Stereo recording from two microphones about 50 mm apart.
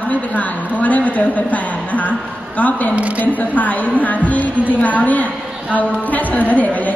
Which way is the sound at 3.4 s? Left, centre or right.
Left.